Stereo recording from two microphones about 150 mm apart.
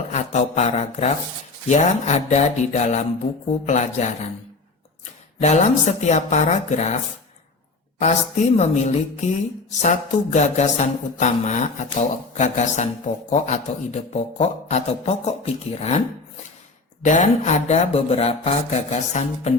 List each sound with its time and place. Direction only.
0.1 s speech: 50° left (ahead or behind)
5.4 s speech: 50° left (ahead or behind)